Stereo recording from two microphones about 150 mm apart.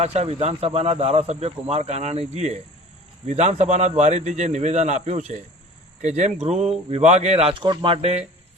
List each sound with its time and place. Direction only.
0.0 s speech: 45° right (ahead or behind)